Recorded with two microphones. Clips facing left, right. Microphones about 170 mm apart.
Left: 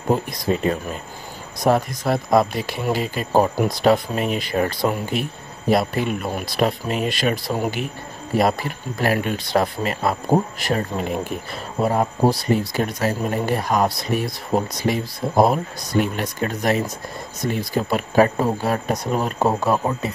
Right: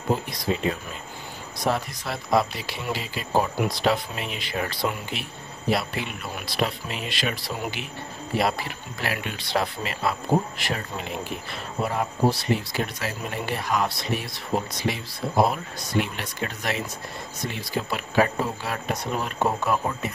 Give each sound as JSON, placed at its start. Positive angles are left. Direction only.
{"t": 0.1, "sound": "speech", "side_deg": 45}